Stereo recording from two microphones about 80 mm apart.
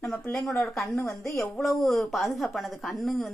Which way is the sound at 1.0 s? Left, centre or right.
Left.